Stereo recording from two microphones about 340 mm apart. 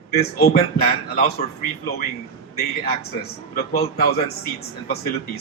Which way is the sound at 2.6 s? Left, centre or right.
Left.